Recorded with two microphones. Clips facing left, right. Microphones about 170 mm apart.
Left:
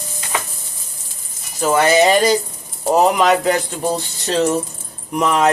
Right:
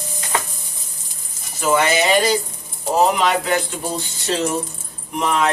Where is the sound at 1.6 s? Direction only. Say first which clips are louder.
Left 4 dB; 40° left (ahead or behind).